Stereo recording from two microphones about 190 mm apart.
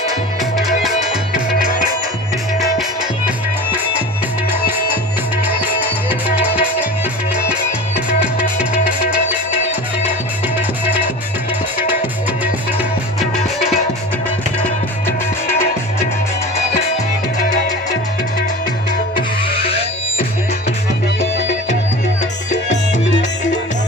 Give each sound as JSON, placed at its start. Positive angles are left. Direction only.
{"t": 0.5, "sound": "music", "side_deg": 0}
{"t": 6.1, "sound": "music", "side_deg": -10}
{"t": 8.2, "sound": "music", "side_deg": -5}
{"t": 15.0, "sound": "music", "side_deg": 10}
{"t": 19.1, "sound": "music", "side_deg": 30}